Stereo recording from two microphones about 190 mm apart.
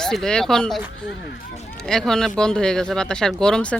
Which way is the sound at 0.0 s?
5° left (ahead or behind).